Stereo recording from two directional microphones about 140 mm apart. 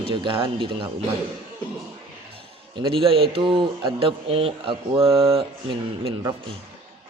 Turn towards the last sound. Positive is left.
turn(degrees=-40)  # may be behind; listen again after turning